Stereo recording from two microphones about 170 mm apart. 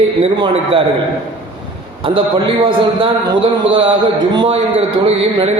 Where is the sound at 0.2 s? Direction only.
30° right (ahead or behind).